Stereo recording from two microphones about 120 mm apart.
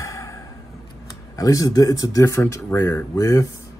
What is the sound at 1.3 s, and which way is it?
Speech, 30° left (ahead or behind).